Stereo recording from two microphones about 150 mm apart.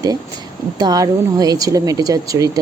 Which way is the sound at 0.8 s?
25° right (ahead or behind).